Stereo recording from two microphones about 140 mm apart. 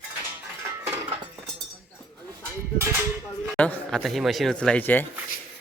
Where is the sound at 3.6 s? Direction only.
5° left (ahead or behind).